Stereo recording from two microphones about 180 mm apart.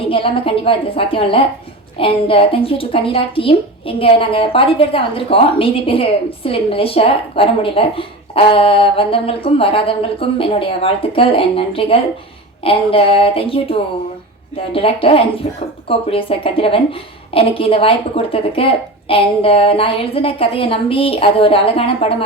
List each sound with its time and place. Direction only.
0.1 s a woman's voice: 30° left (ahead or behind)